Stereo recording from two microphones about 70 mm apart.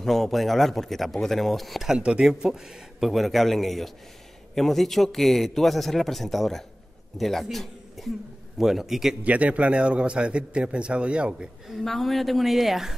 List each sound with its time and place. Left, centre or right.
0.0 s speech: centre
2.0 s a man's voice: centre
9.2 s a man's voice: centre
11.8 s speech: centre